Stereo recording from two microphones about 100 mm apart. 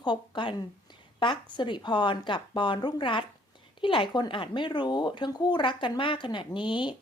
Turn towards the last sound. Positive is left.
turn(degrees=55)  # may be behind; listen again after turning